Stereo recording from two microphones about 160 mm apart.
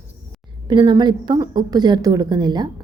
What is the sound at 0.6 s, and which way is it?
A woman's voice, 25° right (ahead or behind).